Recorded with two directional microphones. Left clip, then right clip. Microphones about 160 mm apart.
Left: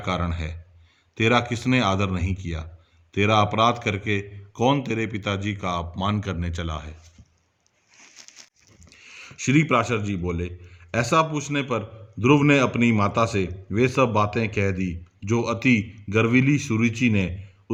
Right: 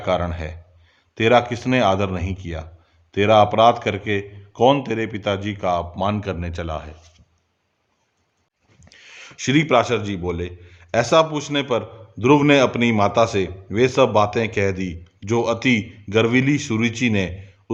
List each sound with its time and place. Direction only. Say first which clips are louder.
0.0 s a man's voice: right 6 dB; 20° left (ahead or behind)
8.8 s a man's voice: right 2 dB; 15° left (ahead or behind)